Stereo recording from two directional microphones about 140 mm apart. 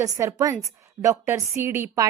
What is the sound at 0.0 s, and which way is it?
A woman's voice, 20° right (ahead or behind).